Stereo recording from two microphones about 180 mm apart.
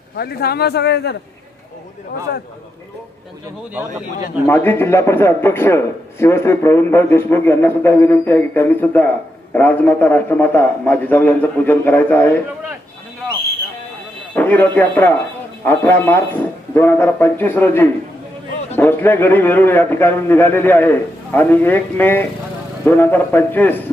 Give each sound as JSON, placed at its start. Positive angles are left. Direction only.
{"t": 0.2, "sound": "a man's voice", "side_deg": 60}
{"t": 4.4, "sound": "a man's voice", "side_deg": 10}
{"t": 14.3, "sound": "a man's voice", "side_deg": 10}